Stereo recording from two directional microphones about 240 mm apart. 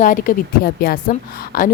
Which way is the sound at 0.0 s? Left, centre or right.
Left.